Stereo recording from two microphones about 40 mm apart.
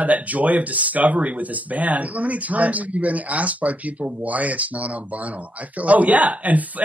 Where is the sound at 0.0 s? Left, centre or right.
Right.